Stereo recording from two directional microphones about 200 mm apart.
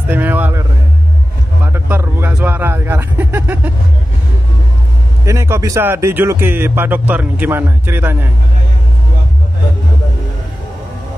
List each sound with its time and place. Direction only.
0.1 s speech: 10° right (ahead or behind)
1.7 s speech: 10° right (ahead or behind)
5.2 s speech: 15° right (ahead or behind)